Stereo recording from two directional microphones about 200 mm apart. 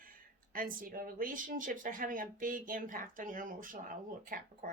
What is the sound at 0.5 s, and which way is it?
Speech, 45° right (ahead or behind).